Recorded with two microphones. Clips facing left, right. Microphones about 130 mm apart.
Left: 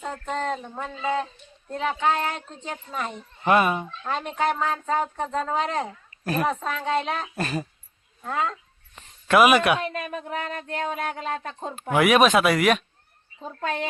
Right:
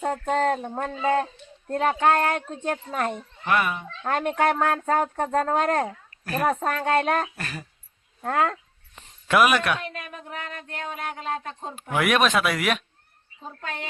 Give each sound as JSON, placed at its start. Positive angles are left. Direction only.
{"t": 0.0, "sound": "speech", "side_deg": -50}
{"t": 3.4, "sound": "speech", "side_deg": 25}
{"t": 4.0, "sound": "speech", "side_deg": -55}
{"t": 7.3, "sound": "speech", "side_deg": 25}
{"t": 8.2, "sound": "speech", "side_deg": -60}
{"t": 9.2, "sound": "a woman's voice", "side_deg": 0}
{"t": 9.9, "sound": "a sound", "side_deg": 30}
{"t": 11.9, "sound": "speech", "side_deg": 0}